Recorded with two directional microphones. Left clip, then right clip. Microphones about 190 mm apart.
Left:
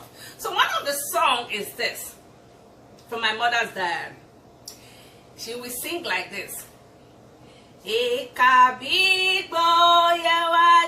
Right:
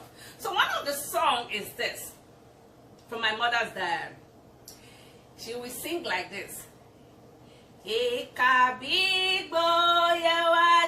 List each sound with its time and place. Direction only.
0.5 s a sound: 15° left (ahead or behind)
3.2 s female singing: 15° left (ahead or behind)
5.5 s female singing: 15° left (ahead or behind)
7.9 s female singing: 15° left (ahead or behind)